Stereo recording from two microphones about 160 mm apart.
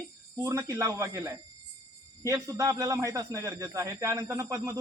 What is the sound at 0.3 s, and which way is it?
Speech, 20° right (ahead or behind).